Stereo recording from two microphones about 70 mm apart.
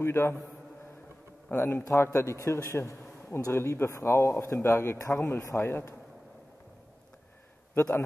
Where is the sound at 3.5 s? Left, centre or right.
Left.